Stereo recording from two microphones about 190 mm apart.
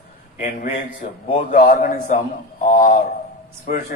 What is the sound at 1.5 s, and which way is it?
A man's voice, 50° left (ahead or behind).